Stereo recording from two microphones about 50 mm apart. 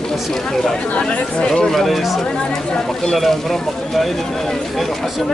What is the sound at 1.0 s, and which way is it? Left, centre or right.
Speech, centre.